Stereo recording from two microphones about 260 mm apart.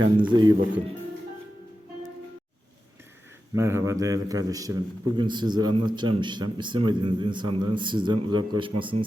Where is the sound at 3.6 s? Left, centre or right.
Centre.